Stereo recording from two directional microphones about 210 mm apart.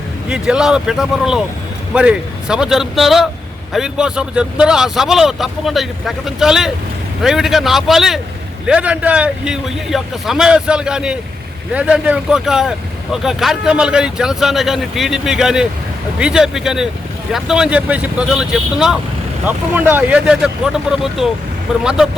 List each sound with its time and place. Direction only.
0.3 s speech: 5° right (ahead or behind)